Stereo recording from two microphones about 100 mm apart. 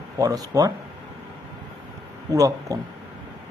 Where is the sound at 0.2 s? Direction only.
40° right (ahead or behind).